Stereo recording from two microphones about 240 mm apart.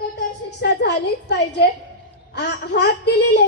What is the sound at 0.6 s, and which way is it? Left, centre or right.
A child's voice, left.